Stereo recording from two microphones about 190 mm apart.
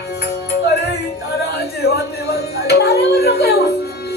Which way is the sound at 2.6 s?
60° left (ahead or behind).